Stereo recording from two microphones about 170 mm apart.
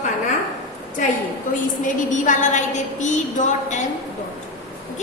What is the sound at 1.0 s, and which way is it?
A woman's voice, 50° left (ahead or behind).